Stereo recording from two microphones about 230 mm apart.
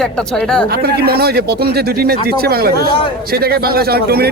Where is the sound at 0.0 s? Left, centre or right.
Centre.